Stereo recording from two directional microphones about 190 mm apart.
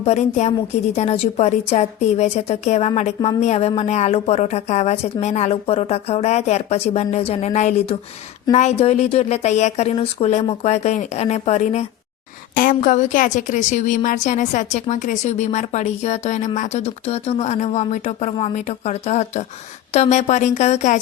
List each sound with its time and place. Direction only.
0.0 s a woman's voice: 35° left (ahead or behind)